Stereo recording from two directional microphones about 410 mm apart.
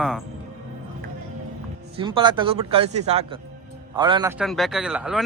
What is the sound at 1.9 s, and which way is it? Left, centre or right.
A man's voice, centre.